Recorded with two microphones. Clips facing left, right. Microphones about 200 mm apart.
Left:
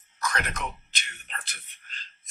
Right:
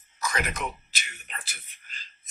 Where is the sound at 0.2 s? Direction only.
5° right (ahead or behind).